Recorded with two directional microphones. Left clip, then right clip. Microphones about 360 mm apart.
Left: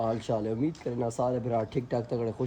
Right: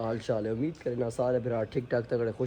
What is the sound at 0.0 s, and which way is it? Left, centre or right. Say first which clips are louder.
Speech: left 1 dB; centre.